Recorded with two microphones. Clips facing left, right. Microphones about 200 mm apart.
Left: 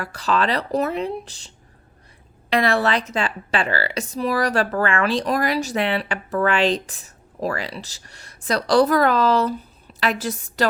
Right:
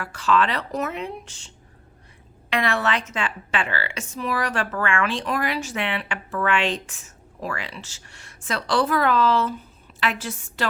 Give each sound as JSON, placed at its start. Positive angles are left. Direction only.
{"t": 0.0, "sound": "a woman's voice", "side_deg": 35}